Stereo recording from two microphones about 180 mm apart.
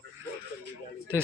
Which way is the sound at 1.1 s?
10° right (ahead or behind).